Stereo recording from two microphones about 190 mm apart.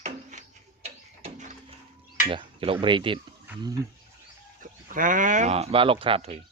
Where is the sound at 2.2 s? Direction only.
30° right (ahead or behind).